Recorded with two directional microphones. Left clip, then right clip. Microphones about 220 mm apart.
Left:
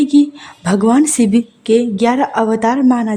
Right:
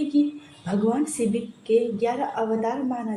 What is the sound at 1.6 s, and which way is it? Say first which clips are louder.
Speech: left 8 dB; 45° left (ahead or behind).